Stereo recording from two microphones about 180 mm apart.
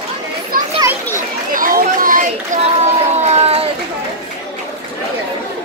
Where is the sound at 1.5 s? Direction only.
50° right (ahead or behind); by 3.7 s 35° right (ahead or behind).